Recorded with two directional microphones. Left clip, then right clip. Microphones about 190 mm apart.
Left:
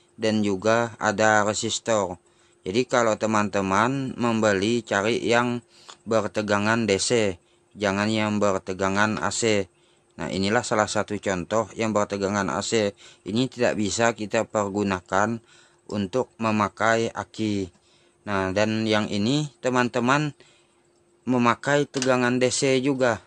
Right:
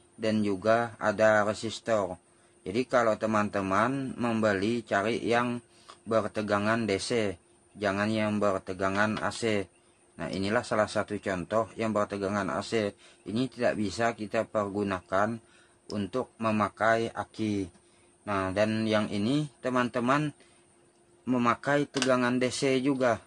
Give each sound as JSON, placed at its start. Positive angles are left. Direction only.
{"t": 0.2, "sound": "speech", "side_deg": 55}